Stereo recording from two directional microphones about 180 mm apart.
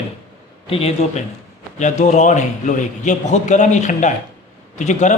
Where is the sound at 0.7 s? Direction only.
35° left (ahead or behind).